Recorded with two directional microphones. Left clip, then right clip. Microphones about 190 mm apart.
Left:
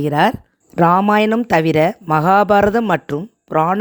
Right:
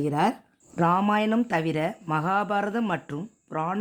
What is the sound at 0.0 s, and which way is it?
Speech, 45° left (ahead or behind).